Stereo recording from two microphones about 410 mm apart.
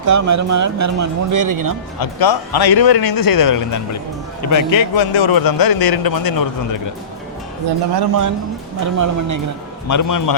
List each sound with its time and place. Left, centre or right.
0.0 s speech: right
2.0 s a man's voice: left
7.9 s speech: right
9.9 s a man's voice: left